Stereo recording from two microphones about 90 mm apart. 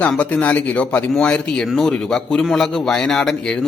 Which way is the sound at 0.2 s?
15° left (ahead or behind).